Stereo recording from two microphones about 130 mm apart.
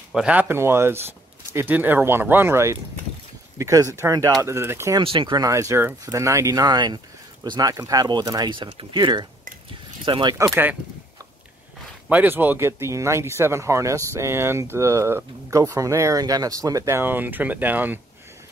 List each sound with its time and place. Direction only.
0.1 s speech: 10° right (ahead or behind)
5.0 s speech: 40° right (ahead or behind)
5.4 s speech: 25° right (ahead or behind)
10.5 s speech: 15° right (ahead or behind)
12.1 s speech: 15° right (ahead or behind)